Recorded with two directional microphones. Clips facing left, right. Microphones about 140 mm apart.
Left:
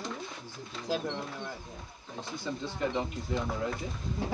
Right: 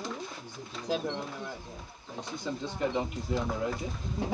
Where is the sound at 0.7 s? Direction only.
Centre (ahead or behind).